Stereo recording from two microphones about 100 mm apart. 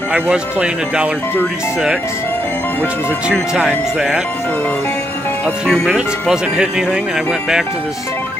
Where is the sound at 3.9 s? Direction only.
5° right (ahead or behind).